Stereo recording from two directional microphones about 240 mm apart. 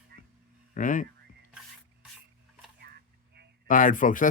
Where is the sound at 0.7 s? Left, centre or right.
Left.